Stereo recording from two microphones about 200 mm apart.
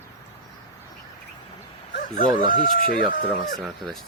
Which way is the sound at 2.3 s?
20° right (ahead or behind).